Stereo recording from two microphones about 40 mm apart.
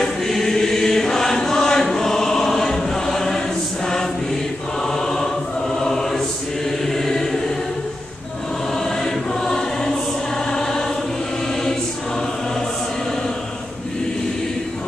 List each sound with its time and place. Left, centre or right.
0.3 s chant: centre
4.8 s choir: centre
6.9 s chant: centre
8.7 s choir: centre